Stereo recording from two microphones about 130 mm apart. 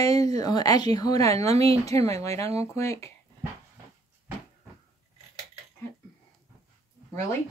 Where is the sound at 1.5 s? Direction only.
50° right (ahead or behind).